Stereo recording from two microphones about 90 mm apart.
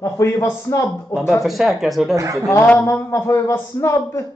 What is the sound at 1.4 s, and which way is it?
Speech, centre (ahead or behind).